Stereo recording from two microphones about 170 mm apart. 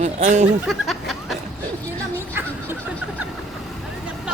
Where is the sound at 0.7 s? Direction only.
Centre (ahead or behind).